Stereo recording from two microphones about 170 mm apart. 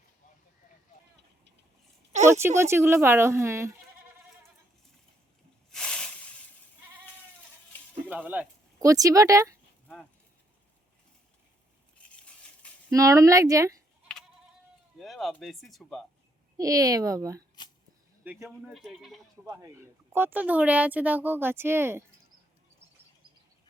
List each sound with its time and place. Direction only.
2.2 s speech: 15° right (ahead or behind)
5.7 s snake: 5° left (ahead or behind)
8.0 s a sound: 10° right (ahead or behind)
12.9 s a woman's voice: 20° right (ahead or behind)
14.9 s speech: centre (ahead or behind)
16.6 s a woman's voice: 20° right (ahead or behind)
18.3 s speech: 5° right (ahead or behind)
19.5 s speech: 15° right (ahead or behind)